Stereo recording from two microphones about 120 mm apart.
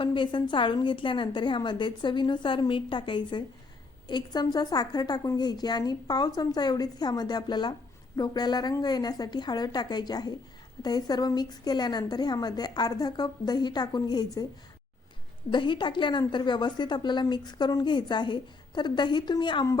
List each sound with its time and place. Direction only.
0.0 s a woman's voice: 45° left (ahead or behind)
15.5 s a woman's voice: 40° left (ahead or behind)